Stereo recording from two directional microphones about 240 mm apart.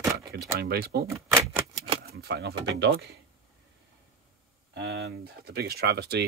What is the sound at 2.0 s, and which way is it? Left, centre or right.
Speech, right.